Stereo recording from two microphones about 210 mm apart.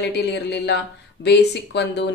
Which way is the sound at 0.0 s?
55° left (ahead or behind).